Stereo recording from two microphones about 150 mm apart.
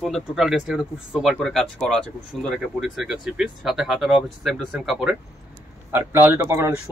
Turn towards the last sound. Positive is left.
turn(degrees=-15)  # may be behind; listen again after turning